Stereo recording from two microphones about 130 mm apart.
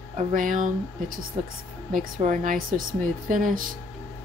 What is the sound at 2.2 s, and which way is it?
Speech, 90° right.